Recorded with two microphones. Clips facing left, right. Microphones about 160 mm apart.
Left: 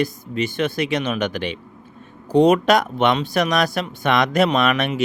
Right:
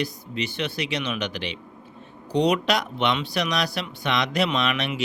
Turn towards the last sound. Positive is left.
turn(degrees=50)  # may be behind; listen again after turning